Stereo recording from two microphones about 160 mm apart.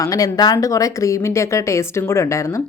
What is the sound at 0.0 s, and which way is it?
Speech, 20° left (ahead or behind).